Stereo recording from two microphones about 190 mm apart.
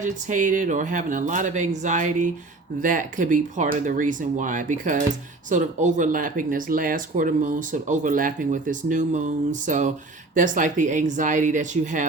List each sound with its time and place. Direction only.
0.0 s speech: 45° right (ahead or behind)